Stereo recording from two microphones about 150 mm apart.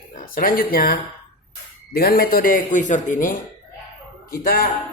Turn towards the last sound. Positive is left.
turn(degrees=75)  # may be behind; listen again after turning